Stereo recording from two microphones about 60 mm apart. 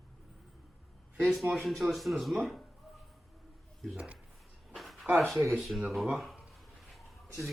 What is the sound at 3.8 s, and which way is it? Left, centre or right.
Speech, centre.